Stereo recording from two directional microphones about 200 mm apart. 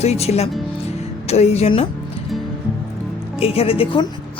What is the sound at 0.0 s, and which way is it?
Speech, 30° left (ahead or behind).